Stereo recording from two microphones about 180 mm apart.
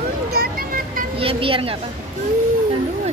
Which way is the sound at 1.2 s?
30° right (ahead or behind).